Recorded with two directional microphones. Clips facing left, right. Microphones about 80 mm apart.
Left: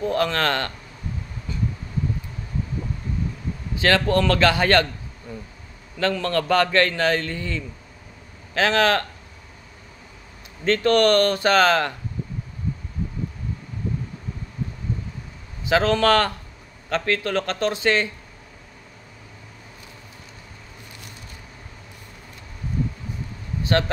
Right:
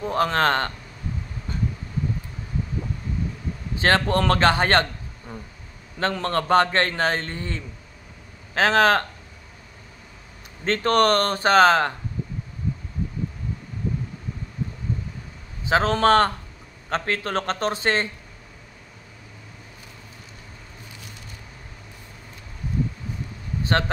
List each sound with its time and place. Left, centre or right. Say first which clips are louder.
0.0 s a man's voice: right 1 dB; right
1.5 s a sound: even; right
3.7 s a man's voice: left 1 dB; right
5.9 s a man's voice: left 1 dB; right
10.6 s a man's voice: left 2 dB; right
15.7 s a man's voice: even; right
23.6 s vehicle: left 1 dB; right